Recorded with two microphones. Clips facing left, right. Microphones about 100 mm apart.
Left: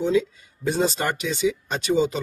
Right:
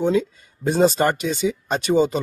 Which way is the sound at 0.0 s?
45° right (ahead or behind).